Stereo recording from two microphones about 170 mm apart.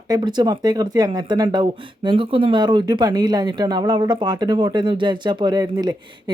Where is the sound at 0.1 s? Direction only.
25° right (ahead or behind).